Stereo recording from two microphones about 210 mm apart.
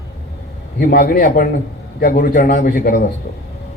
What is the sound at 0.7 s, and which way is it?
A man's voice, 45° left (ahead or behind).